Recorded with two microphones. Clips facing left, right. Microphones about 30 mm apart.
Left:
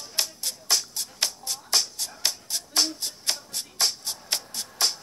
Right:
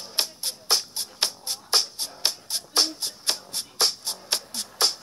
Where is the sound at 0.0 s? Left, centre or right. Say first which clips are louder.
Right 1 dB; right.